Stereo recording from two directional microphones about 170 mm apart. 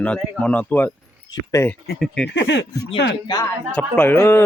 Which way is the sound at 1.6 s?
40° left (ahead or behind).